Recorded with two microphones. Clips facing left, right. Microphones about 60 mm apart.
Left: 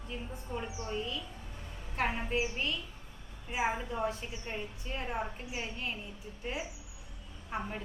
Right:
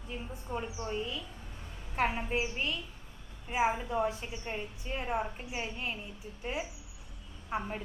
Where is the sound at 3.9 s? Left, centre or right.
Centre.